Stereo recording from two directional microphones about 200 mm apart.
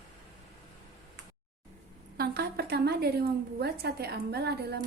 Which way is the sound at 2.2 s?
55° right (ahead or behind).